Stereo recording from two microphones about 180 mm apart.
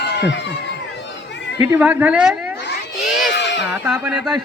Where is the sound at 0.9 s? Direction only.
75° left (ahead or behind).